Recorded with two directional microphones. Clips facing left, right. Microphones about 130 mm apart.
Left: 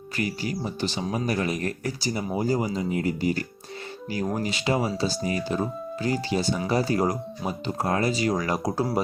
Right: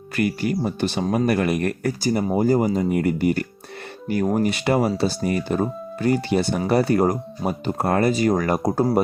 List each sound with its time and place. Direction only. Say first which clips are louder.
0.2 s speech: right 7 dB; 55° right (ahead or behind)